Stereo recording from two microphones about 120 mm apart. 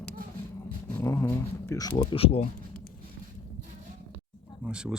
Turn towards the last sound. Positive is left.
turn(degrees=-5)  # may be behind; listen again after turning